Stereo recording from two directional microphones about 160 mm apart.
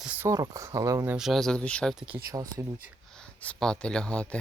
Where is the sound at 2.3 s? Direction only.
20° right (ahead or behind).